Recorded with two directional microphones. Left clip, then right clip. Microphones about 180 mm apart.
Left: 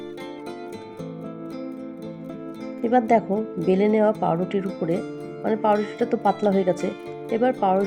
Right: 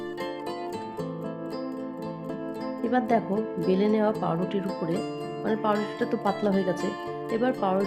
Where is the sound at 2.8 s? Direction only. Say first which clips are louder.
Left 6 dB; 15° left (ahead or behind).